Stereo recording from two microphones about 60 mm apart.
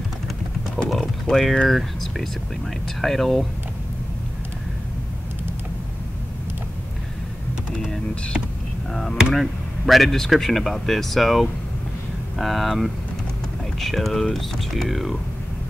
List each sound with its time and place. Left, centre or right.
0.8 s mechanisms: centre
1.2 s speech: centre
9.3 s speech: centre